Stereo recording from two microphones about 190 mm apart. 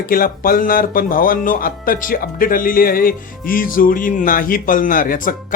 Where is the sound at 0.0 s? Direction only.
50° left (ahead or behind).